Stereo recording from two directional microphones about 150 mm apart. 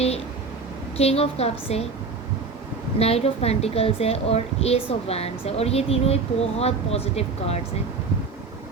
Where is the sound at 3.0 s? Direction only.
45° left (ahead or behind).